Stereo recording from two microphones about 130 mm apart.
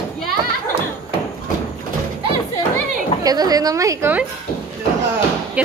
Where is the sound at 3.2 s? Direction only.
30° right (ahead or behind).